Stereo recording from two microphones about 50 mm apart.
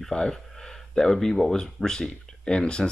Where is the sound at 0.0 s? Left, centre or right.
Centre.